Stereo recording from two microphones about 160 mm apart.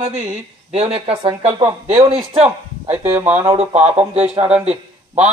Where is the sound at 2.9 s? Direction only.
10° right (ahead or behind).